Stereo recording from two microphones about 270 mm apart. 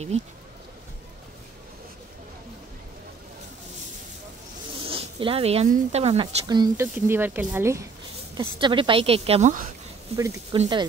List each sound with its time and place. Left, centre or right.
0.1 s a woman's voice: right
4.8 s a woman's voice: centre
10.1 s speech: centre